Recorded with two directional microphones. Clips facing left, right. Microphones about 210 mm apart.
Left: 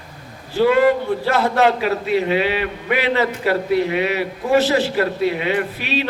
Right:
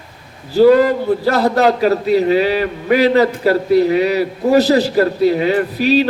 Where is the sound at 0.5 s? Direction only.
40° right (ahead or behind).